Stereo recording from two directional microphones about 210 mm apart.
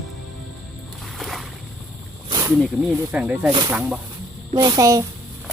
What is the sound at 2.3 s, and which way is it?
Snake, 15° right (ahead or behind).